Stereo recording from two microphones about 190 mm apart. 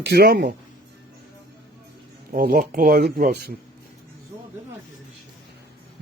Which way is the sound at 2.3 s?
50° right (ahead or behind).